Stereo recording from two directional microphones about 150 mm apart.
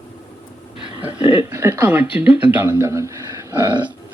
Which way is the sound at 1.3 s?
15° right (ahead or behind).